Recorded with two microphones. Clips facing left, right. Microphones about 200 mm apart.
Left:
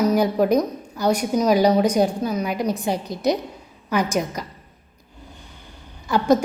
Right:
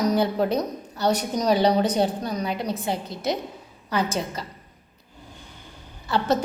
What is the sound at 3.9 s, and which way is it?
Speech, 15° left (ahead or behind).